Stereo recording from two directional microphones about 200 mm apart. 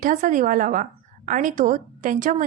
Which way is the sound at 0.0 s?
40° right (ahead or behind).